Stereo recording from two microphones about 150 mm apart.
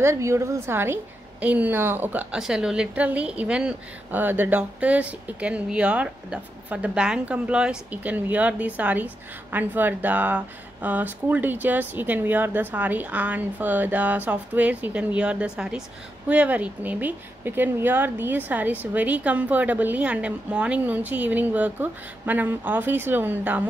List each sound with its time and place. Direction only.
0.0 s a woman's voice: 20° right (ahead or behind)